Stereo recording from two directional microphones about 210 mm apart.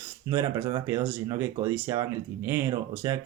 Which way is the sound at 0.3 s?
15° right (ahead or behind).